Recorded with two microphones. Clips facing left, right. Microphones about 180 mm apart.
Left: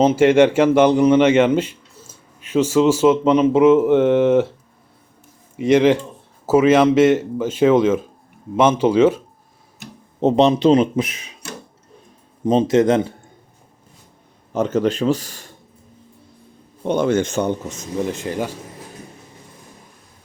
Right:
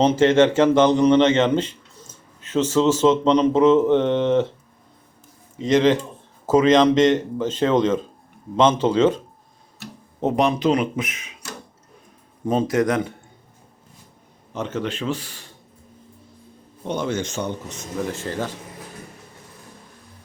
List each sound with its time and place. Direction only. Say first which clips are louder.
0.0 s speech: left 3 dB; 10° left (ahead or behind)
5.5 s speech: left 3 dB; 10° left (ahead or behind)
10.2 s a man's voice: left 5 dB; 25° left (ahead or behind)
12.5 s a man's voice: left 5 dB; 20° left (ahead or behind)
14.5 s a man's voice: left 8 dB; 40° left (ahead or behind)
16.8 s speech: left 7 dB; 55° left (ahead or behind)
18.0 s speech: left 3 dB; 15° left (ahead or behind)